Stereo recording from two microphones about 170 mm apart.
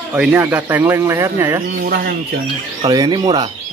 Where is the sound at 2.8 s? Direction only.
25° right (ahead or behind).